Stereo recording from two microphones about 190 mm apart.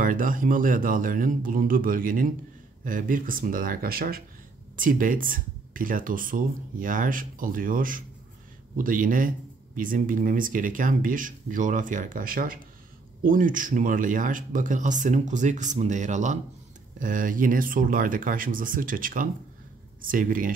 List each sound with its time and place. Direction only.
0.0 s speech: 45° right (ahead or behind)